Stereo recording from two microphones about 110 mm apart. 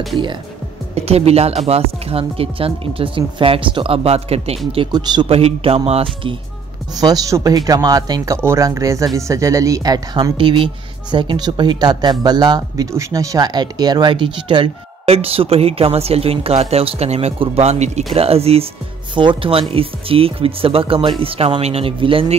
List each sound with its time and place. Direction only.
0.9 s speech: 70° right (ahead or behind)
4.9 s speech: 40° right (ahead or behind)
5.3 s speech: 65° right (ahead or behind)
6.9 s speech: 35° right (ahead or behind)
10.3 s speech: 50° right (ahead or behind)
15.0 s speech: 65° right (ahead or behind); by 18.0 s 90° right
18.1 s speech: 65° right (ahead or behind)
19.1 s speech: 50° right (ahead or behind)